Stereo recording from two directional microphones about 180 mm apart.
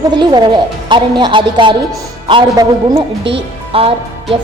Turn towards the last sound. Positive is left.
turn(degrees=-30)  # may be behind; listen again after turning